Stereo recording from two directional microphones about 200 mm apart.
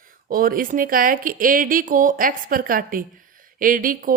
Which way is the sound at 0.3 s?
45° right (ahead or behind).